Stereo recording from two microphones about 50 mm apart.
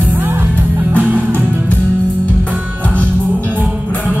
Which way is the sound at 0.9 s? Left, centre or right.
Left.